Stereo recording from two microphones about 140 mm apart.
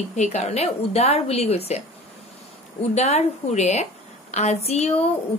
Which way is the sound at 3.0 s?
50° left (ahead or behind).